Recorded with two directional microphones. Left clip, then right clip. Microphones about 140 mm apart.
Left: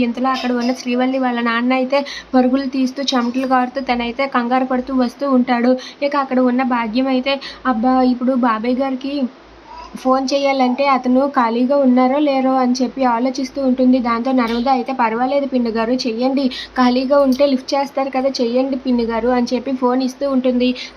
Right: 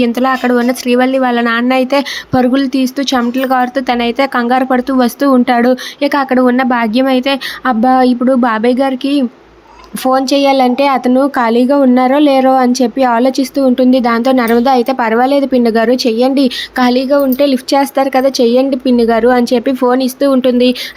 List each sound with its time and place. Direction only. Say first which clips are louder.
0.0 s speech: right 6 dB; 45° right (ahead or behind)